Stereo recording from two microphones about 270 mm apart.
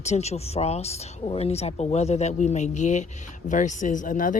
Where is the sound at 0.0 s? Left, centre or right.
Left.